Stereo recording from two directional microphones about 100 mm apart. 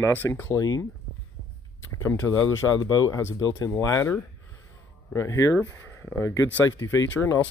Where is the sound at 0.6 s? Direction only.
40° left (ahead or behind).